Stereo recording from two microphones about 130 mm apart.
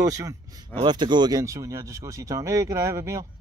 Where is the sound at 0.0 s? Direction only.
25° right (ahead or behind).